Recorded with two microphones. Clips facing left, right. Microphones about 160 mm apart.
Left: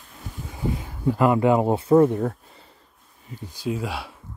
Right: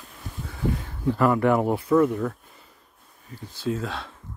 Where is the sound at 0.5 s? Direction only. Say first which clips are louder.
Even; 10° left (ahead or behind); by 2.7 s 35° left (ahead or behind).